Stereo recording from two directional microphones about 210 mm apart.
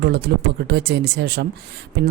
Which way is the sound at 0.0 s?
50° right (ahead or behind).